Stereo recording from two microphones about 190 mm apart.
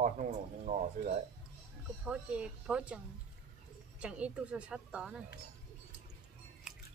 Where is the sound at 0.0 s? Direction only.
40° right (ahead or behind).